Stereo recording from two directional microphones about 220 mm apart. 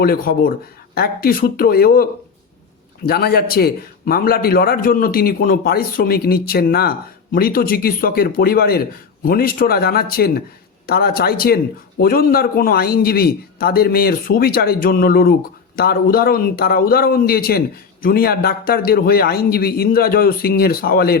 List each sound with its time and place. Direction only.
0.0 s a man's voice: 45° left (ahead or behind)
3.1 s a man's voice: 45° left (ahead or behind)